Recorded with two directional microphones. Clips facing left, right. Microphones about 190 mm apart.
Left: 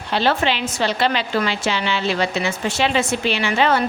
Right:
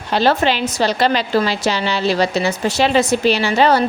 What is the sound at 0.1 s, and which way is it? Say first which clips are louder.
A woman's voice: right 4 dB; 40° right (ahead or behind).